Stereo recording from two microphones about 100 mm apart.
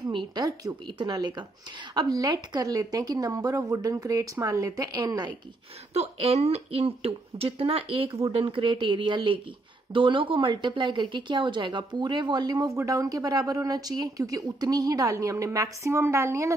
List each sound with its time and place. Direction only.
0.0 s a woman's voice: 50° right (ahead or behind)
5.9 s a woman's voice: 85° right; by 16.5 s 30° right (ahead or behind)